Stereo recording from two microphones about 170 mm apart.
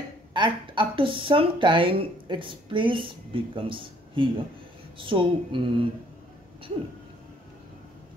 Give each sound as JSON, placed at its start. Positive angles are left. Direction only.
{"t": 0.3, "sound": "speech", "side_deg": -30}